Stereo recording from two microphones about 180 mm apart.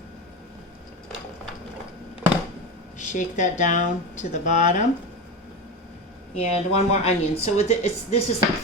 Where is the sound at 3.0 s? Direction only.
45° left (ahead or behind).